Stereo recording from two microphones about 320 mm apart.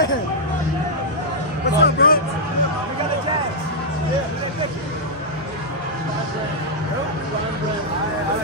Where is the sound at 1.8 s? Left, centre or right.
Left.